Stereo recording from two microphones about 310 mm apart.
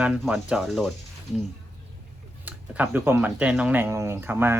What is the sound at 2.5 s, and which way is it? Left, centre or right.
Speech, centre.